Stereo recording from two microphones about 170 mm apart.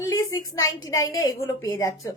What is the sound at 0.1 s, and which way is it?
A woman's voice, 20° left (ahead or behind).